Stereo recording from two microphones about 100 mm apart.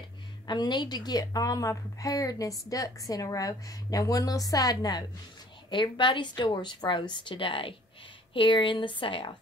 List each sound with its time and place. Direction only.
0.5 s a woman's voice: 50° left (ahead or behind)
5.7 s a woman's voice: 55° left (ahead or behind)